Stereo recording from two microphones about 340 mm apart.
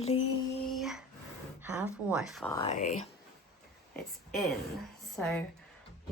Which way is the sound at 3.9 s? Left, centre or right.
Centre.